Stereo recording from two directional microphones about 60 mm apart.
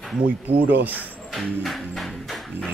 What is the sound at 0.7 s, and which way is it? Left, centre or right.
Speech, right.